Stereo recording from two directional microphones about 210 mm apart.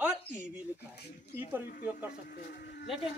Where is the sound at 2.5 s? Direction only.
50° left (ahead or behind).